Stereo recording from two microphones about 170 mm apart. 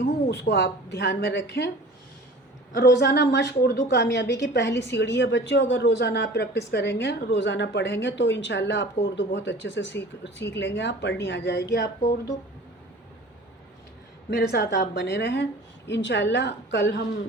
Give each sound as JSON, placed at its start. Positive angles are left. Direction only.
{"t": 0.0, "sound": "a woman's voice", "side_deg": 85}
{"t": 2.7, "sound": "a woman's voice", "side_deg": 75}
{"t": 11.7, "sound": "a woman's voice", "side_deg": 70}
{"t": 14.3, "sound": "a woman's voice", "side_deg": 70}